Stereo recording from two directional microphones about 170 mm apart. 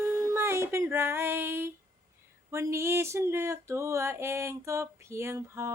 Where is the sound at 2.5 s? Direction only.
15° right (ahead or behind).